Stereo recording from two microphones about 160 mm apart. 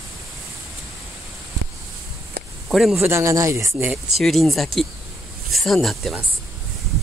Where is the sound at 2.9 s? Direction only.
15° right (ahead or behind).